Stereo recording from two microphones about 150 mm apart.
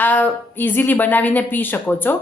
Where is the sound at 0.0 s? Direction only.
10° left (ahead or behind).